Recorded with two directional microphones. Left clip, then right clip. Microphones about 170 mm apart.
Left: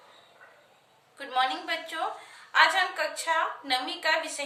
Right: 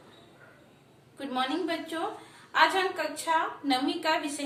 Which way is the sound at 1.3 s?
20° left (ahead or behind).